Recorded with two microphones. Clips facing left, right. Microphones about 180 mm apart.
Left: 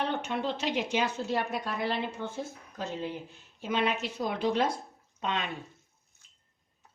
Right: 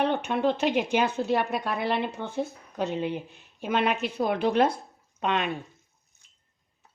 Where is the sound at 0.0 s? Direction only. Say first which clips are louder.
Right 6 dB; 60° right (ahead or behind).